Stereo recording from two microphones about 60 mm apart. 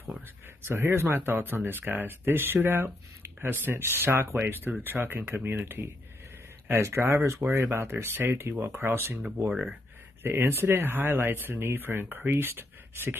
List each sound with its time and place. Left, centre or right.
0.6 s speech: right
9.5 s speech: centre
10.2 s speech: right